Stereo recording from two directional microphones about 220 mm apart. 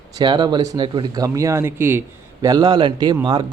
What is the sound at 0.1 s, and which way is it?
A man's voice, 20° right (ahead or behind).